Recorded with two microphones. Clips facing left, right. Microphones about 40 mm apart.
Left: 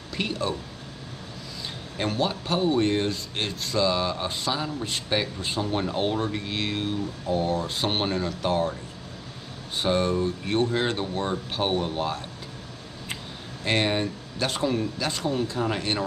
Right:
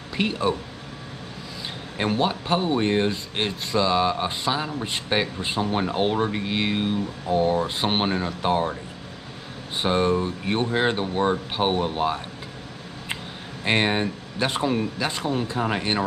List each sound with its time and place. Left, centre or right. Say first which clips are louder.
0.2 s speech: right 5 dB; right
2.0 s speech: right 3 dB; right
9.8 s speech: right 2 dB; centre
13.7 s speech: right 2 dB; right